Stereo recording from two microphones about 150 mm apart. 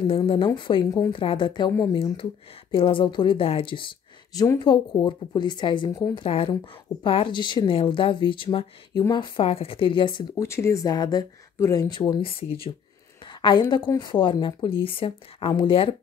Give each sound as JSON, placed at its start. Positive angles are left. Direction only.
{"t": 0.0, "sound": "a woman's voice", "side_deg": 35}
{"t": 10.4, "sound": "speech", "side_deg": 20}
{"t": 12.3, "sound": "a woman's voice", "side_deg": 40}